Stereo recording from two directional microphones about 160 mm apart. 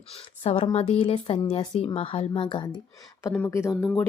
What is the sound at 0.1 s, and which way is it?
Speech, 35° left (ahead or behind).